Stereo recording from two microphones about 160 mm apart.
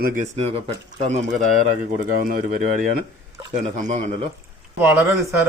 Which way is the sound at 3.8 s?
50° right (ahead or behind).